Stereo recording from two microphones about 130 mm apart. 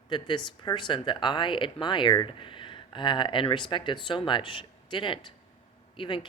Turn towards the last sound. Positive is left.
turn(degrees=40)  # may be behind; listen again after turning